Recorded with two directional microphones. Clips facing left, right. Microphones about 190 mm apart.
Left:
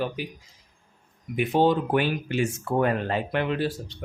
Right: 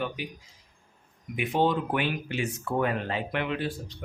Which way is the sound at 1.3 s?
35° left (ahead or behind).